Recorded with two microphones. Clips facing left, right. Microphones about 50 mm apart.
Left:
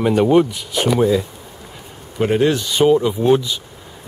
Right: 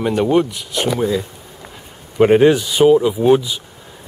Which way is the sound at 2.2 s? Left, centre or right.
Right.